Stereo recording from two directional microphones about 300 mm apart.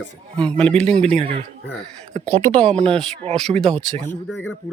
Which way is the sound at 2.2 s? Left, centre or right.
Centre.